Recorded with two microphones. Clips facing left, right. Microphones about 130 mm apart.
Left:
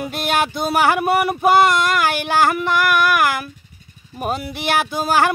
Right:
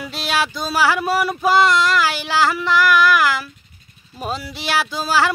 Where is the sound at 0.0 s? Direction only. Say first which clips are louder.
Left 2 dB; 55° left (ahead or behind).